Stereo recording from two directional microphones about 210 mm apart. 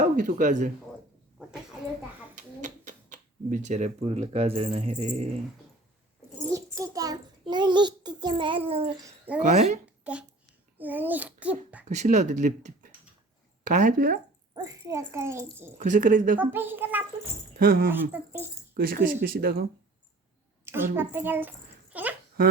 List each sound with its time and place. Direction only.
0.0 s speech: 40° right (ahead or behind)
2.3 s speech: 35° right (ahead or behind)
6.5 s a child's voice: 15° right (ahead or behind)
9.0 s speech: 5° right (ahead or behind)
9.4 s speech: 35° right (ahead or behind)
10.0 s a child's voice: 5° right (ahead or behind)
11.9 s speech: 35° right (ahead or behind)
14.5 s a child's voice: 15° right (ahead or behind)
15.8 s speech: 40° right (ahead or behind)
16.4 s a child's voice: 10° right (ahead or behind)
17.6 s speech: 45° right (ahead or behind)
17.9 s a child's voice: 10° right (ahead or behind)
18.8 s speech: 45° right (ahead or behind)
20.7 s a child's voice: 10° right (ahead or behind)